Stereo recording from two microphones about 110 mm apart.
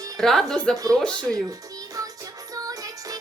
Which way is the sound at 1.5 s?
35° right (ahead or behind).